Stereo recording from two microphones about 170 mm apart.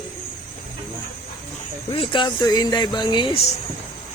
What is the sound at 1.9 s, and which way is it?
Speech, 30° left (ahead or behind).